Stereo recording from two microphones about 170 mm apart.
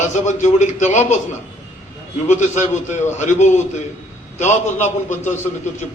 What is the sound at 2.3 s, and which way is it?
A man's voice, 45° left (ahead or behind).